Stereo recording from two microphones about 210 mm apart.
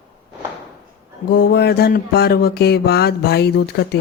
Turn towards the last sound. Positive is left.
turn(degrees=50)  # may be behind; listen again after turning